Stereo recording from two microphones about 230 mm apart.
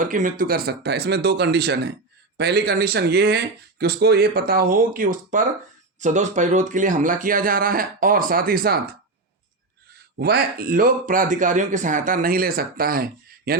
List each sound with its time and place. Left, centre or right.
0.0 s speech: right
10.2 s speech: right